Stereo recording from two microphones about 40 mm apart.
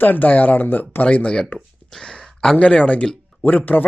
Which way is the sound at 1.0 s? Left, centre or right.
Left.